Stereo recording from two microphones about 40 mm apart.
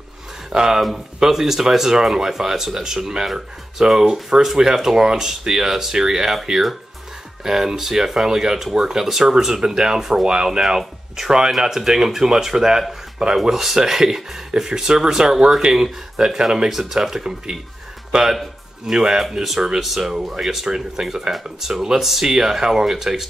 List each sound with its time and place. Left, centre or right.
0.5 s speech: centre
18.9 s speech: centre